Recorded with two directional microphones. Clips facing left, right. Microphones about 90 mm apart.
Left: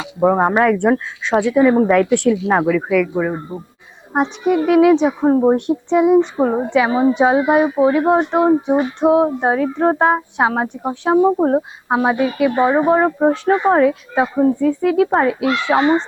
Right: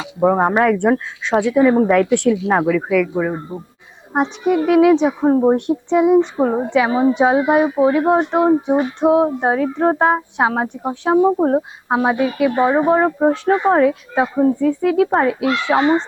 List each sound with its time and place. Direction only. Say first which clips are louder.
0.0 s a woman's voice: even; 25° left (ahead or behind)